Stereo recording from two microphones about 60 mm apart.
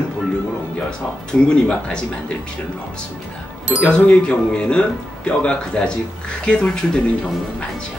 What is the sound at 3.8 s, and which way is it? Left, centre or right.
Speech, centre.